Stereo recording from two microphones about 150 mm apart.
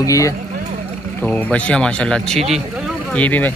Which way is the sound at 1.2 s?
10° left (ahead or behind).